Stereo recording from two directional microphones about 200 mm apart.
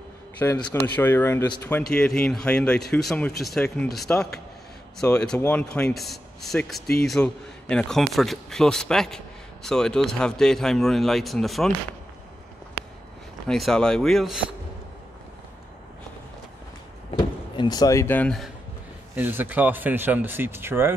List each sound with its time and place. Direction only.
0.4 s a man's voice: 15° left (ahead or behind)
13.5 s a man's voice: centre (ahead or behind)
17.1 s speech: 20° left (ahead or behind); by 18.5 s 5° left (ahead or behind)
19.1 s speech: 10° right (ahead or behind)